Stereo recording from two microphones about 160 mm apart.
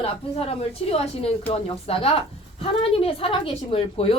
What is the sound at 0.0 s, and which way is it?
A woman's voice, 40° left (ahead or behind).